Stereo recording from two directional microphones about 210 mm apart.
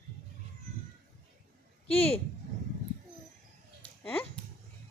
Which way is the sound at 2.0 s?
30° left (ahead or behind).